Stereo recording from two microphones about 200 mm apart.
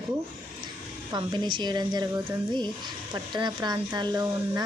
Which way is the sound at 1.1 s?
20° right (ahead or behind).